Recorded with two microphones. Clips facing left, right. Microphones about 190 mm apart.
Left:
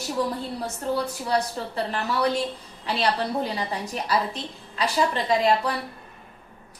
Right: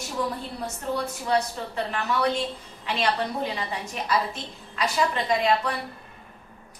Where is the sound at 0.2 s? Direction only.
35° left (ahead or behind).